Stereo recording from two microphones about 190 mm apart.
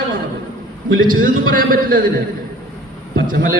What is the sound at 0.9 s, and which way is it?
A man's voice, 50° right (ahead or behind).